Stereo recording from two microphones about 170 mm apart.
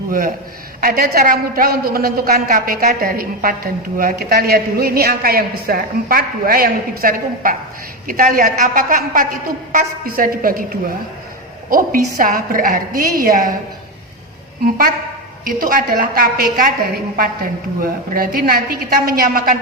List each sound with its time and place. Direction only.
0.8 s a woman's voice: 60° right (ahead or behind)
15.6 s a woman's voice: 55° right (ahead or behind)